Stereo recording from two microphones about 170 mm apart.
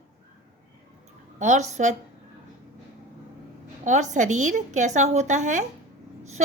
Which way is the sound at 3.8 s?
45° right (ahead or behind).